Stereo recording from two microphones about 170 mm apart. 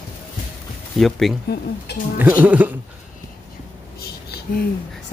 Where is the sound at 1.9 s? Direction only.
70° left (ahead or behind).